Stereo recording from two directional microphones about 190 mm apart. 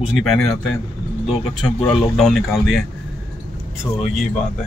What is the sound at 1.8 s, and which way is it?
Speech, 5° left (ahead or behind).